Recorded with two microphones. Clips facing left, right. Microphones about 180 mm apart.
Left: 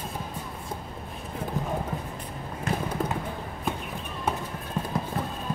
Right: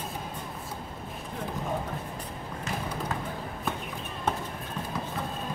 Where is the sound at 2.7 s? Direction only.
55° left (ahead or behind).